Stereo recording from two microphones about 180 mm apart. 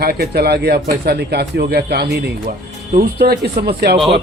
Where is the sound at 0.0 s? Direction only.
60° right (ahead or behind).